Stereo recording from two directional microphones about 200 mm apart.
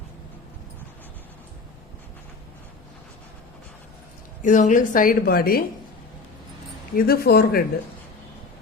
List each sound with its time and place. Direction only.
4.4 s a woman's voice: 40° left (ahead or behind)
6.9 s a woman's voice: 50° left (ahead or behind)